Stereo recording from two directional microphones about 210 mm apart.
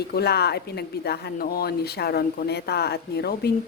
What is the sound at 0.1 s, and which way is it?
Speech, 50° left (ahead or behind).